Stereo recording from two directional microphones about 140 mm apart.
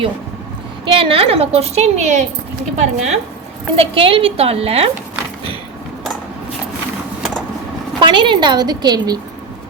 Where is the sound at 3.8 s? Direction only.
40° right (ahead or behind).